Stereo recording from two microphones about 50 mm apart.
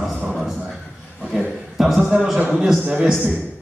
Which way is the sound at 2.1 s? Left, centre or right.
Centre.